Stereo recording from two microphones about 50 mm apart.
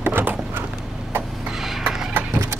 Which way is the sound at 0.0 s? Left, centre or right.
Right.